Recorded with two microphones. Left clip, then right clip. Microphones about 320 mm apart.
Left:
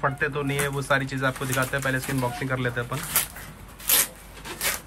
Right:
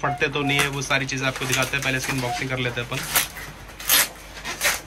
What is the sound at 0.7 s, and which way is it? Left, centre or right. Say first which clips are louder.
Speech: right 1 dB; centre.